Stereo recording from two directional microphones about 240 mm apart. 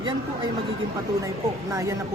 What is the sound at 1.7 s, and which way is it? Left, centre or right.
Speech, centre.